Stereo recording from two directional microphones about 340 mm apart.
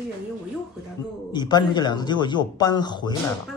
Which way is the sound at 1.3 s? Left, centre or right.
Centre.